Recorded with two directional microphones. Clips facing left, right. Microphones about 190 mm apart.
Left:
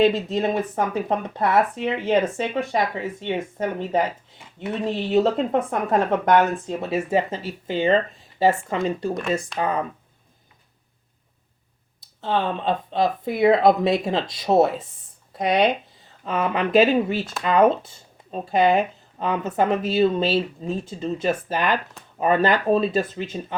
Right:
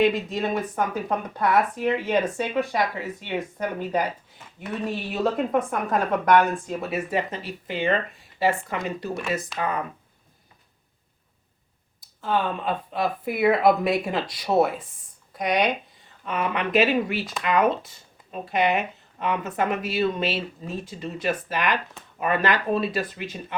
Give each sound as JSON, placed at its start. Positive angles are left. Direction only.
{"t": 0.0, "sound": "speech", "side_deg": 25}
{"t": 12.2, "sound": "speech", "side_deg": 25}